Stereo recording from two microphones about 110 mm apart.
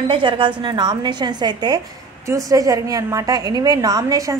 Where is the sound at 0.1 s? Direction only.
50° right (ahead or behind).